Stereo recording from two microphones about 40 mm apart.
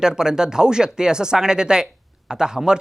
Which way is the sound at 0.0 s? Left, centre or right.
Centre.